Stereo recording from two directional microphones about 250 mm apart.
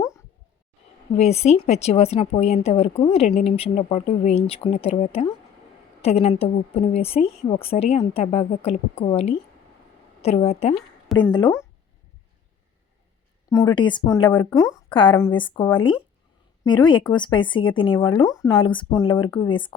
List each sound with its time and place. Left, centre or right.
1.1 s a woman's voice: left
13.5 s a woman's voice: centre